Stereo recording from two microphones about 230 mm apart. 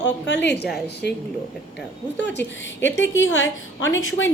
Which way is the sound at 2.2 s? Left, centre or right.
Left.